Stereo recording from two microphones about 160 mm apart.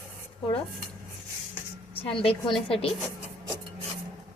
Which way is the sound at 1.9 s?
35° left (ahead or behind).